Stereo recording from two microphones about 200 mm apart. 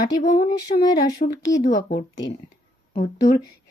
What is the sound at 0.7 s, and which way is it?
Speech, 20° left (ahead or behind).